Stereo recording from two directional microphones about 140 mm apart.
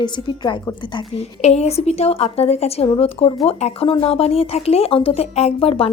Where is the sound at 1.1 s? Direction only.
50° left (ahead or behind).